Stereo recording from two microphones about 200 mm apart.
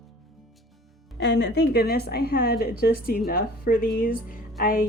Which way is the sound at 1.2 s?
60° left (ahead or behind).